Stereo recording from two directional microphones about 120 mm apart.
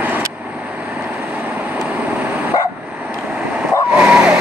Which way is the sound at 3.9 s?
5° right (ahead or behind).